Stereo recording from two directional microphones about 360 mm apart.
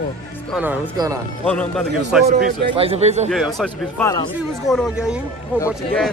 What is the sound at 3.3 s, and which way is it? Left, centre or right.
A man's voice, centre.